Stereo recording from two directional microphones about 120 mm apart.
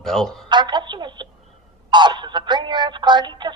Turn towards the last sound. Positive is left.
turn(degrees=-40)  # may be behind; listen again after turning